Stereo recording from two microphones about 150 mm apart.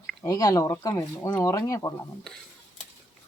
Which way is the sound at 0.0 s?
5° left (ahead or behind).